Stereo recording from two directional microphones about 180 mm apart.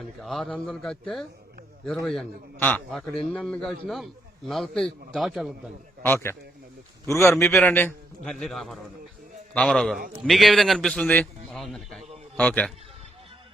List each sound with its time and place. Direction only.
0.0 s a man's voice: centre (ahead or behind)
6.0 s a man's voice: 10° left (ahead or behind)